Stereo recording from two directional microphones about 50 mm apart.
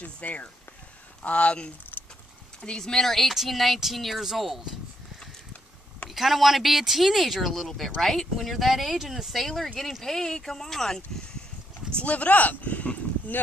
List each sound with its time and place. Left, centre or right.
0.0 s speech: left
1.9 s keys jangling: left
2.6 s speech: centre
6.0 s speech: centre
12.0 s speech: left